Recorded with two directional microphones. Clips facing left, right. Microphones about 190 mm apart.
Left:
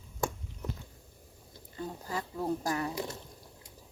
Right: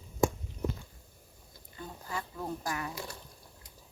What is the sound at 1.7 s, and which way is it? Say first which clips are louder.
Speech: left 3 dB; 35° left (ahead or behind).